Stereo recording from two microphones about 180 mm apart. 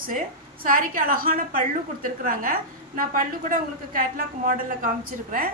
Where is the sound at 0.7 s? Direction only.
50° right (ahead or behind).